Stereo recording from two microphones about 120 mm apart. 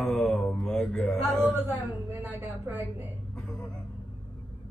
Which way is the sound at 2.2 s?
20° right (ahead or behind).